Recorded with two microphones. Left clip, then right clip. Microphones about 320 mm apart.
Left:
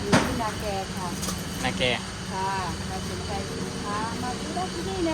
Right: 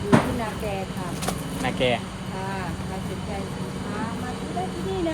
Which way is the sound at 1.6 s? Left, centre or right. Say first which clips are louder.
Right 2 dB; centre.